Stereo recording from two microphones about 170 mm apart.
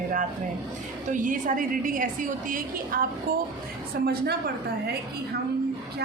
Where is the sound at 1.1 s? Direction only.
50° right (ahead or behind).